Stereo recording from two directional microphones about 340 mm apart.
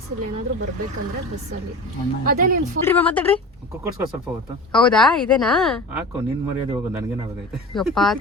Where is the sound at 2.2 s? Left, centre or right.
Right.